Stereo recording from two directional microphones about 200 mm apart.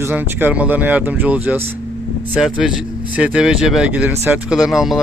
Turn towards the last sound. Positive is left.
turn(degrees=0)  # may be behind; listen again after turning